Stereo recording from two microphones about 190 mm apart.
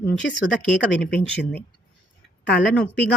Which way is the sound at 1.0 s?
5° left (ahead or behind).